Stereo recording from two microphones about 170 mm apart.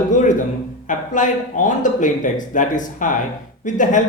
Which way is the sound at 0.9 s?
50° left (ahead or behind).